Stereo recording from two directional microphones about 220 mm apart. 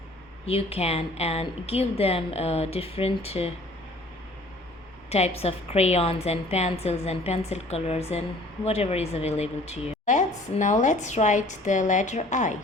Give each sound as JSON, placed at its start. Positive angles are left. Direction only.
{"t": 0.4, "sound": "a woman's voice", "side_deg": 25}
{"t": 5.0, "sound": "a woman's voice", "side_deg": 30}